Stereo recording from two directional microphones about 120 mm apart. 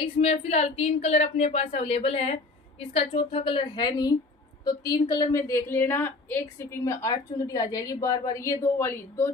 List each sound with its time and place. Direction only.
0.0 s a woman's voice: 55° left (ahead or behind); by 5.4 s 35° left (ahead or behind)
5.5 s a woman's voice: 20° left (ahead or behind)